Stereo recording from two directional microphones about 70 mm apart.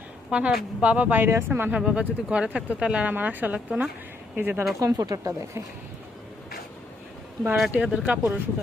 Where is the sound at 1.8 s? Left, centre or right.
Centre; by 4.6 s right.